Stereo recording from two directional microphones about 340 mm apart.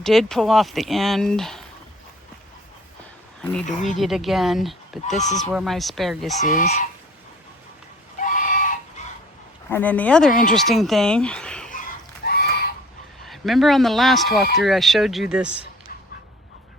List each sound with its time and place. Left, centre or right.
0.0 s speech: centre
3.4 s speech: centre
6.4 s fowl: left
8.2 s chicken: left
9.0 s a sound: centre
9.6 s speech: centre
12.2 s horse: left
13.2 s speech: centre